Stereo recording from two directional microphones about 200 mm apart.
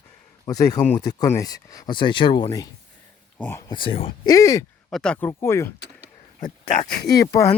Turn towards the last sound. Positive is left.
turn(degrees=15)  # may be behind; listen again after turning